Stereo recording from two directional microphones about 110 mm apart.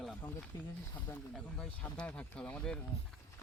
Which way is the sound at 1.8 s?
10° left (ahead or behind).